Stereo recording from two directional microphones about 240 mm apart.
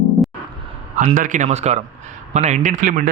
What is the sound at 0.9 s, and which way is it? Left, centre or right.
Speech, right.